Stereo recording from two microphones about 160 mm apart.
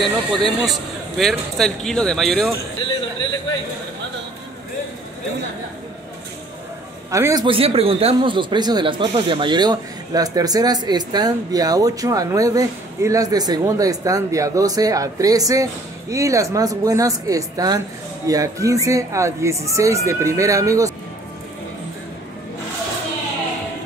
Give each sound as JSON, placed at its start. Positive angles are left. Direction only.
{"t": 0.0, "sound": "a man's voice", "side_deg": 0}
{"t": 7.1, "sound": "speech", "side_deg": -20}
{"t": 7.4, "sound": "speech", "side_deg": -35}